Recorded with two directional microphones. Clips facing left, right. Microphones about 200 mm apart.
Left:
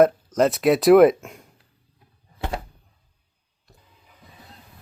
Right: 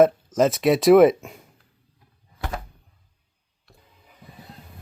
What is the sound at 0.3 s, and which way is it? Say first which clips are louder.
Speech: even; centre (ahead or behind).